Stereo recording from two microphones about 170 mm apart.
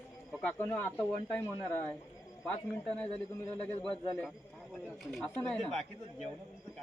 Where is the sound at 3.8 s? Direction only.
30° left (ahead or behind).